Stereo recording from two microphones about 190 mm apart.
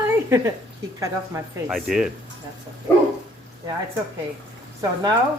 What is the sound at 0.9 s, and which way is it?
Speech, 15° right (ahead or behind).